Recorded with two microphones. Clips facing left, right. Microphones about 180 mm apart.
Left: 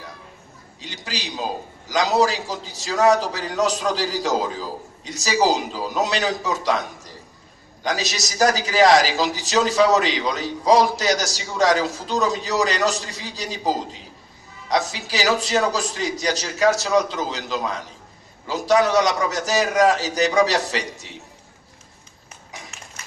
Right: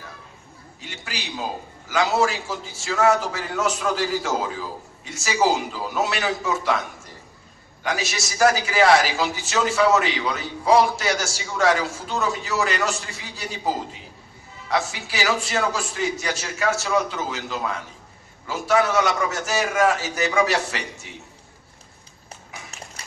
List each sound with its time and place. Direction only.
0.8 s a man's voice: 35° left (ahead or behind)
7.8 s a man's voice: 40° left (ahead or behind)
9.9 s a man's voice: 20° left (ahead or behind)
10.2 s a man's voice: 40° left (ahead or behind)
23.0 s a sound: 35° right (ahead or behind)